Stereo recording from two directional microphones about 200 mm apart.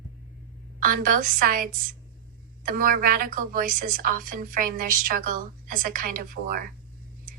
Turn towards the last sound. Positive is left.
turn(degrees=-45)  # may be behind; listen again after turning